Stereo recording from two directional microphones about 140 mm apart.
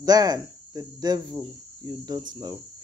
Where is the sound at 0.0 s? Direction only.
25° right (ahead or behind).